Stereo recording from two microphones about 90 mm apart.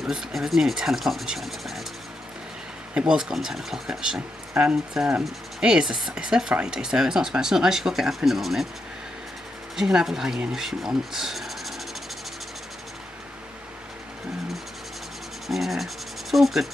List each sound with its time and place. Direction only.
0.0 s speech: 5° right (ahead or behind)
2.9 s speech: 10° right (ahead or behind)
9.8 s speech: 5° right (ahead or behind)
15.4 s rub: centre (ahead or behind)